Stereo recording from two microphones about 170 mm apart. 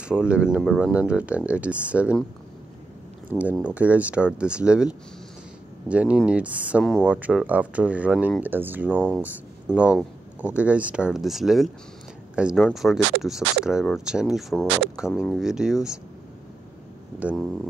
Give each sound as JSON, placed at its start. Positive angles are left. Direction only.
{"t": 0.0, "sound": "speech", "side_deg": -5}
{"t": 3.3, "sound": "speech", "side_deg": -10}
{"t": 6.8, "sound": "speech", "side_deg": 5}
{"t": 7.1, "sound": "speech", "side_deg": -10}
{"t": 17.2, "sound": "speech", "side_deg": -5}